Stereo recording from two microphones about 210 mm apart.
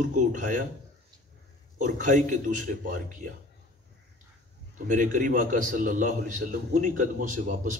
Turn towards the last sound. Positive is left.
turn(degrees=-35)  # may be behind; listen again after turning